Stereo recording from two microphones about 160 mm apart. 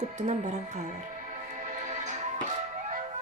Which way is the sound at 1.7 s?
50° right (ahead or behind).